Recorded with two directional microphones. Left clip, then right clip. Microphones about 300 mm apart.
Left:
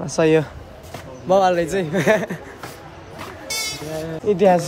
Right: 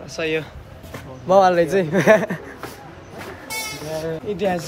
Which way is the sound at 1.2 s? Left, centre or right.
Centre.